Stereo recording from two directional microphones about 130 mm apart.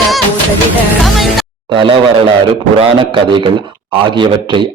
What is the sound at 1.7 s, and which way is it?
A man's voice, 40° right (ahead or behind).